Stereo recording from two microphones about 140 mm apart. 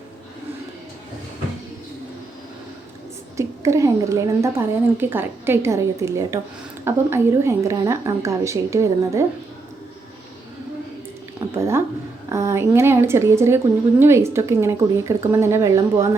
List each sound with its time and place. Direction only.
3.3 s a woman's voice: 20° right (ahead or behind)
11.3 s a sound: 20° right (ahead or behind)
12.3 s a woman's voice: 20° right (ahead or behind)